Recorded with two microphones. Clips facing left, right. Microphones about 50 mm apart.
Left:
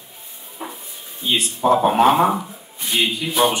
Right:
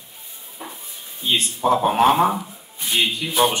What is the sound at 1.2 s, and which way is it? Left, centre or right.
Speech, centre.